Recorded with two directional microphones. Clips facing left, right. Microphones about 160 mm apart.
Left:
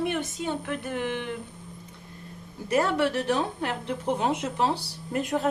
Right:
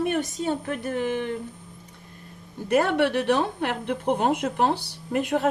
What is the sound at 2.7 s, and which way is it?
A woman's voice, 70° right (ahead or behind).